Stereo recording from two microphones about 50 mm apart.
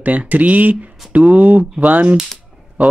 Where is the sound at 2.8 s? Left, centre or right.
Right.